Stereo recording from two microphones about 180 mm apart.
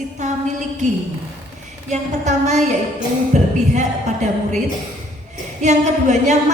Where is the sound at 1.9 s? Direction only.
40° right (ahead or behind).